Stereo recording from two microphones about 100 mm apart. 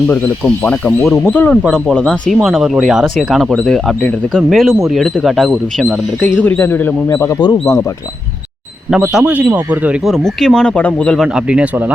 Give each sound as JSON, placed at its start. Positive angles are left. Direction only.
{"t": 0.1, "sound": "a man's voice", "side_deg": 20}
{"t": 2.0, "sound": "speech", "side_deg": 0}
{"t": 6.6, "sound": "a man's voice", "side_deg": 20}
{"t": 9.1, "sound": "speech", "side_deg": -10}
{"t": 10.1, "sound": "speech", "side_deg": 5}
{"t": 10.8, "sound": "speech", "side_deg": 15}
{"t": 11.1, "sound": "speech", "side_deg": 0}
{"t": 11.4, "sound": "speech", "side_deg": -10}